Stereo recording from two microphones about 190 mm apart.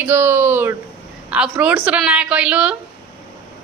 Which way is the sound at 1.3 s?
5° right (ahead or behind).